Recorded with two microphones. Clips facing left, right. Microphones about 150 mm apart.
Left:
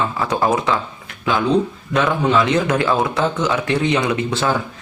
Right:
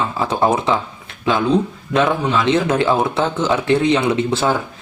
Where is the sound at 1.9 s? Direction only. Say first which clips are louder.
Even; 25° right (ahead or behind).